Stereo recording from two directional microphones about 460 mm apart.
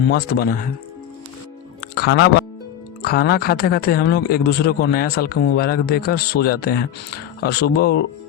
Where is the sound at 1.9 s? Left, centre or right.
Left.